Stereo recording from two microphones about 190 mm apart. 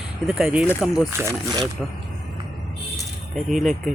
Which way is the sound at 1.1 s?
15° right (ahead or behind).